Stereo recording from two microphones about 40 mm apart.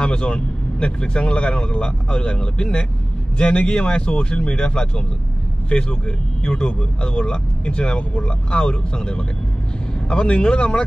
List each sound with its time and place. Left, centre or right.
0.0 s a man's voice: left